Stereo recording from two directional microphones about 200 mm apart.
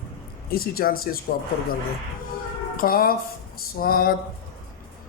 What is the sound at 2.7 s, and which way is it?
Speech, 45° left (ahead or behind).